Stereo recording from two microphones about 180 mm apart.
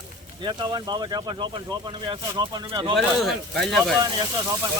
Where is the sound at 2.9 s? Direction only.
Centre (ahead or behind).